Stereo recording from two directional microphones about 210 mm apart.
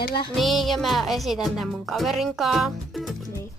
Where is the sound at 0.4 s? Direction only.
Centre (ahead or behind).